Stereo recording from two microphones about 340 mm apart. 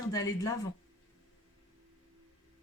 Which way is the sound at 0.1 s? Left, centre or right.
Centre.